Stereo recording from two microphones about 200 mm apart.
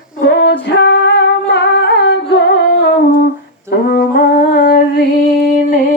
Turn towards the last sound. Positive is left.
turn(degrees=45)  # may be behind; listen again after turning